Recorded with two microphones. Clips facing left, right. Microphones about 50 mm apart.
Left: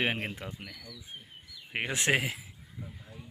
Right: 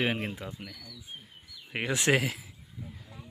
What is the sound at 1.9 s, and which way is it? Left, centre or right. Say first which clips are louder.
Speech: right 2 dB; left.